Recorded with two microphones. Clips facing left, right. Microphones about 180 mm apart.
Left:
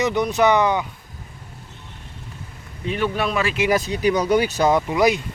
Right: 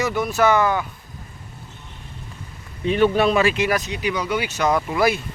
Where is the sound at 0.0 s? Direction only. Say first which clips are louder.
Left 1 dB; 20° left (ahead or behind).